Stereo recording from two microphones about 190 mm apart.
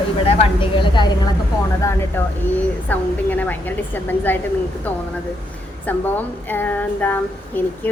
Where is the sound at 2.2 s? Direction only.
10° left (ahead or behind).